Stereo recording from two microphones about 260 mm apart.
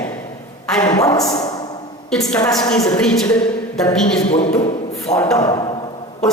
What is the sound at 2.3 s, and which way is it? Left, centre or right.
A woman's voice, centre.